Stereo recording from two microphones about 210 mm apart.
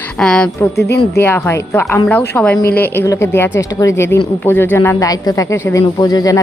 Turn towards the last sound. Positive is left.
turn(degrees=15)  # may be behind; listen again after turning